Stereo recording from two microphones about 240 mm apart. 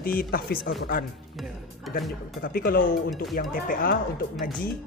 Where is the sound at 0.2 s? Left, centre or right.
Left.